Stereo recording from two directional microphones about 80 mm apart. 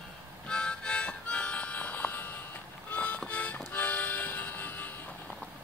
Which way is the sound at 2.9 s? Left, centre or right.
Left.